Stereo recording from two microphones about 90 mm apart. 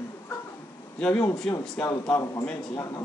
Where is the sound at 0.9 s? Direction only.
10° left (ahead or behind).